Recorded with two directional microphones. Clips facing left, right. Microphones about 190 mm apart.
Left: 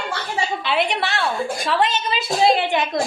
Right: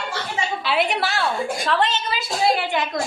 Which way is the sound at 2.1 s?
20° left (ahead or behind).